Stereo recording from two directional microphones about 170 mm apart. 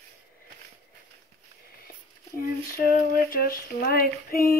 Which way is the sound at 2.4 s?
60° left (ahead or behind).